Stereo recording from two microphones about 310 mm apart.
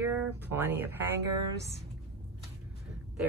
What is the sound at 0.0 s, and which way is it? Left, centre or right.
Speech, centre.